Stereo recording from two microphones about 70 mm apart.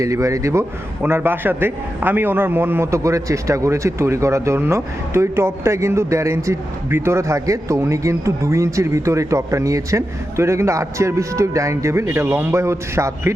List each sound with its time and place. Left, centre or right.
0.0 s speech: right
1.0 s a man's voice: right
2.8 s speech: right